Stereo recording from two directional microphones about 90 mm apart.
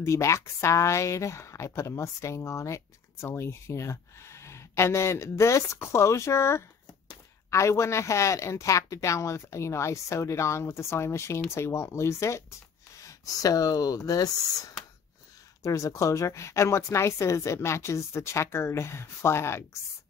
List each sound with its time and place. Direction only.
0.0 s speech: 35° left (ahead or behind)